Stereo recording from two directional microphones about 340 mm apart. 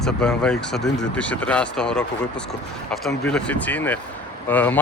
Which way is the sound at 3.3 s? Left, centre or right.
Centre.